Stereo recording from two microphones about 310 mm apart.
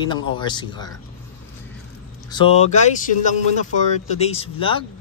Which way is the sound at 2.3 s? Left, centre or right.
Centre.